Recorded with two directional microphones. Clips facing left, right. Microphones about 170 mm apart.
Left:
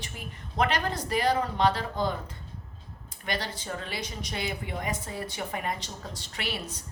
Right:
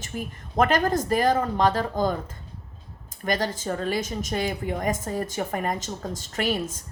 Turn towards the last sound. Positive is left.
turn(degrees=-45)  # may be behind; listen again after turning